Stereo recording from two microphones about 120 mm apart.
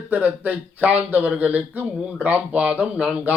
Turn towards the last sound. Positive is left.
turn(degrees=-10)  # may be behind; listen again after turning